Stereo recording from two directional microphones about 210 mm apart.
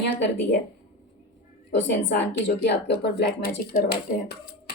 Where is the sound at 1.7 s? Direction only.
55° left (ahead or behind).